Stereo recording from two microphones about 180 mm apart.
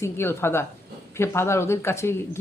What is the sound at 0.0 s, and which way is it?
Speech, 15° left (ahead or behind).